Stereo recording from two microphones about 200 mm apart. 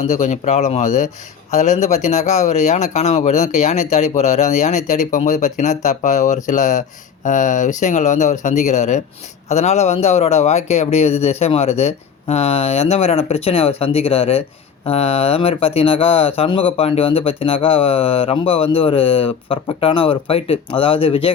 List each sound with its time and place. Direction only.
0.1 s speech: 35° left (ahead or behind)